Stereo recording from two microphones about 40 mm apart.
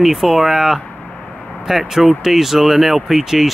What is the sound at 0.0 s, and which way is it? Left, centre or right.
Speech, centre.